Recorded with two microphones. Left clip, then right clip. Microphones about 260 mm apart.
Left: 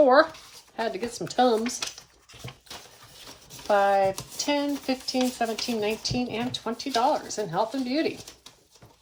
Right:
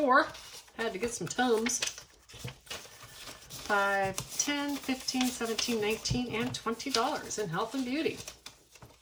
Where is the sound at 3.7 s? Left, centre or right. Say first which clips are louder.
Left 7 dB; centre.